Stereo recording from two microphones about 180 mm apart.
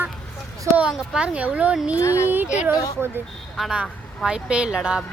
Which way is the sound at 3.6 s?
Centre (ahead or behind).